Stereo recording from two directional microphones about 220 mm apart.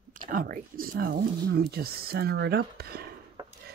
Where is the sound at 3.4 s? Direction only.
15° right (ahead or behind).